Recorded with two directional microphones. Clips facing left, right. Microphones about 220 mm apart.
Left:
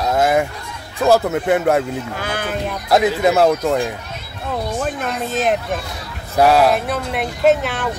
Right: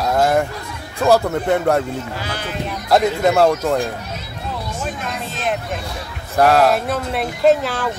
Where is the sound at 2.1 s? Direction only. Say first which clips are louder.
Left 3 dB; 50° left (ahead or behind).